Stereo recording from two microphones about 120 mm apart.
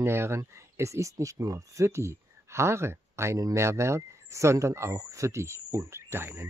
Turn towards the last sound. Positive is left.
turn(degrees=-20)  # may be behind; listen again after turning